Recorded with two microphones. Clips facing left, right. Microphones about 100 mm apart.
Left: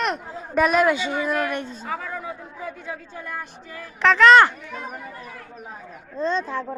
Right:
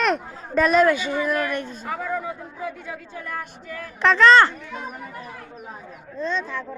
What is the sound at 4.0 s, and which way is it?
Speech, centre (ahead or behind).